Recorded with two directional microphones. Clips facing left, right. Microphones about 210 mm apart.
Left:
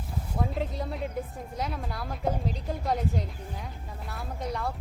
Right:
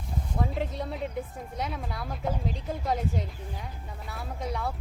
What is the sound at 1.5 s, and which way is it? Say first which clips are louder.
A woman's voice: even; centre (ahead or behind).